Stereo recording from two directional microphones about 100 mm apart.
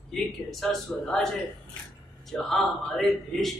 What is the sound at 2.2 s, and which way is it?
A man's voice, 5° left (ahead or behind).